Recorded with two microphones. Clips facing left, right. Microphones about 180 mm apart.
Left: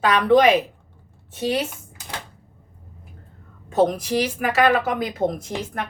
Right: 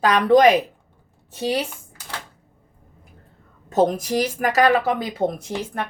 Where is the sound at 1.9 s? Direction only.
15° left (ahead or behind).